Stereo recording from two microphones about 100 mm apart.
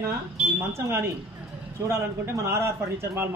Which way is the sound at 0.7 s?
25° right (ahead or behind).